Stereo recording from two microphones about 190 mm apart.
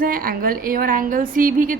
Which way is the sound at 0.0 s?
50° right (ahead or behind).